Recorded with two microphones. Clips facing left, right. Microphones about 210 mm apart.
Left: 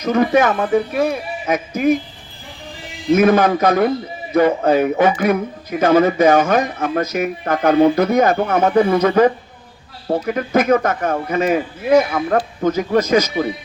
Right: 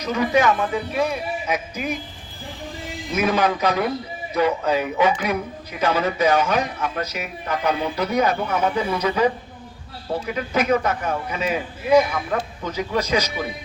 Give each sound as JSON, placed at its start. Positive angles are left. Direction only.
{"t": 0.0, "sound": "a man's voice", "side_deg": 50}
{"t": 3.1, "sound": "a man's voice", "side_deg": 50}